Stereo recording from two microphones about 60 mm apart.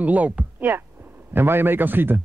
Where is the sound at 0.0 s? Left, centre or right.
Right.